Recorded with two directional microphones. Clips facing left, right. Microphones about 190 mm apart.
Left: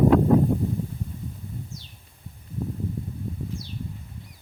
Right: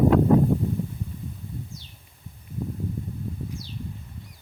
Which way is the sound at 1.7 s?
40° left (ahead or behind).